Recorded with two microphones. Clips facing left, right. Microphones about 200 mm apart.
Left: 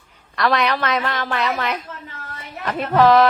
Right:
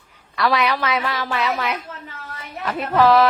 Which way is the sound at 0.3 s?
5° right (ahead or behind).